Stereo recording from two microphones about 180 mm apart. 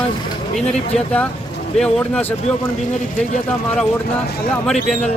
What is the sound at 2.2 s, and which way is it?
Speech, 35° left (ahead or behind).